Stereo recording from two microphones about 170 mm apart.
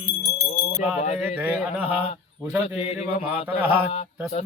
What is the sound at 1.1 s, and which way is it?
Speech, 10° right (ahead or behind).